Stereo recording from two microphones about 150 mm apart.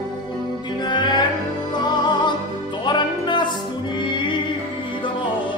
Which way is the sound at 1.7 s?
30° left (ahead or behind).